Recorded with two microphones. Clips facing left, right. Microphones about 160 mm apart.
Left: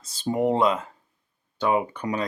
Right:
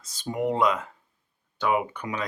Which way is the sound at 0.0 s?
30° left (ahead or behind).